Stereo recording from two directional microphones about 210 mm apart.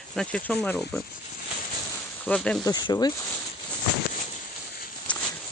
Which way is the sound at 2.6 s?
20° left (ahead or behind).